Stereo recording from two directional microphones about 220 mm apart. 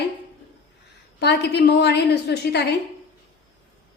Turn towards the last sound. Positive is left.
turn(degrees=50)  # may be behind; listen again after turning